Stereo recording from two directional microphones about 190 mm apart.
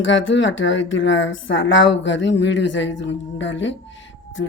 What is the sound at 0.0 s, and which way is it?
Speech, 80° left.